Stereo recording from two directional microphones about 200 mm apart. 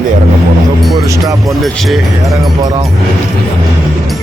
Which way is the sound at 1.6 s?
Centre (ahead or behind).